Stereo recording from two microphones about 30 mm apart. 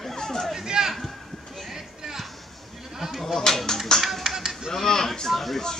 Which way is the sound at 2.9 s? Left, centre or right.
Centre.